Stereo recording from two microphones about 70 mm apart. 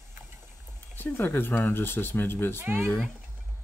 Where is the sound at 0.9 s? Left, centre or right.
Left.